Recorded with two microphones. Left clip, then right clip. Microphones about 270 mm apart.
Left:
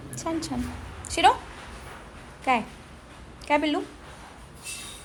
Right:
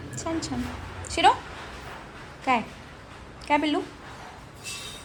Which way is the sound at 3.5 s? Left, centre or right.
Centre.